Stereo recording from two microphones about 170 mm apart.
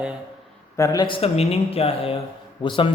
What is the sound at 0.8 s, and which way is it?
A man's voice, 25° left (ahead or behind).